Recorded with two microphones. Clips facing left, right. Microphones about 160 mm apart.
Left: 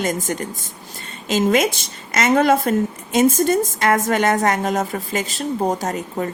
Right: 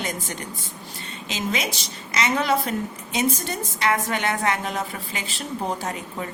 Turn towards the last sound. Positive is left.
turn(degrees=45)  # may be behind; listen again after turning